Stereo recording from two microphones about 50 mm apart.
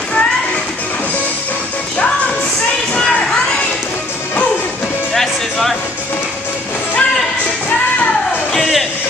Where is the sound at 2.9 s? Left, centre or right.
Centre.